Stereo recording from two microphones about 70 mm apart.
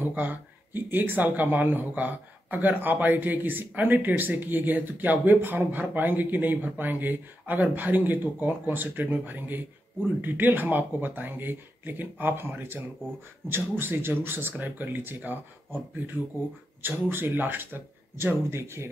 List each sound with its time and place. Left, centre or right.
0.0 s speech: right
16.8 s speech: right